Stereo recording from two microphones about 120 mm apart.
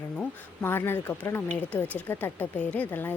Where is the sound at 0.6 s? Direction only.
20° left (ahead or behind).